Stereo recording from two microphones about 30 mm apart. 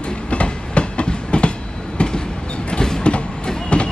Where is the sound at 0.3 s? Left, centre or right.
Left.